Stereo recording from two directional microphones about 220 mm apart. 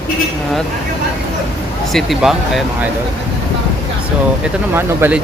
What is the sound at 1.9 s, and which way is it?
Speech, centre (ahead or behind).